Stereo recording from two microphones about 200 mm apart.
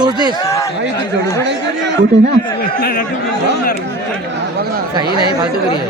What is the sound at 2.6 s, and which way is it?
Speech, 45° left (ahead or behind).